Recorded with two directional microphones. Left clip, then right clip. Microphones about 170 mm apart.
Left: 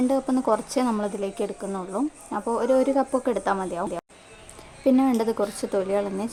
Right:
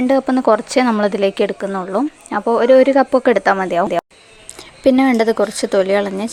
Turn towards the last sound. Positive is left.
turn(degrees=-20)  # may be behind; listen again after turning